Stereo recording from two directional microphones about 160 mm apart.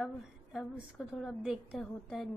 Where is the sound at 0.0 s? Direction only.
Centre (ahead or behind).